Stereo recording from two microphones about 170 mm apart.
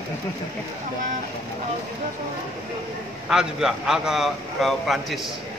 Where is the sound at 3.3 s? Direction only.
5° right (ahead or behind).